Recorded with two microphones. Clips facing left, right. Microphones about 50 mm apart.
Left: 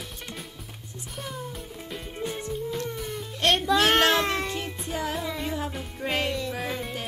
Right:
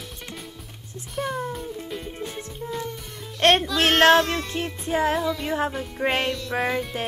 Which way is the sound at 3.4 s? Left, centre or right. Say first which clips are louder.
Right 5 dB; right.